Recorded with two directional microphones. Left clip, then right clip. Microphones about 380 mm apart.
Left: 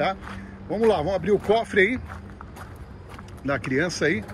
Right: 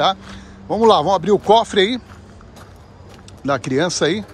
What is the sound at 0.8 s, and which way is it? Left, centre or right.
Speech, right.